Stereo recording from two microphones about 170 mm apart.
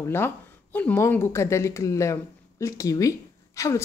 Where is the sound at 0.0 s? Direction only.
15° left (ahead or behind).